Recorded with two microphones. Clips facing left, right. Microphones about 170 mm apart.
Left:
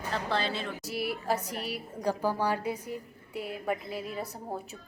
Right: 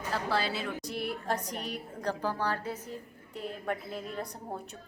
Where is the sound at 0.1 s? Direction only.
5° right (ahead or behind).